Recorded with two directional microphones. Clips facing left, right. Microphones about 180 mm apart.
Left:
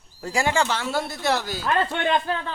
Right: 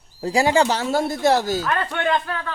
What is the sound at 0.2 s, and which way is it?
Speech, 35° right (ahead or behind).